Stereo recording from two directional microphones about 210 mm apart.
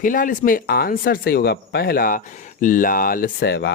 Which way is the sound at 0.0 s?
40° left (ahead or behind).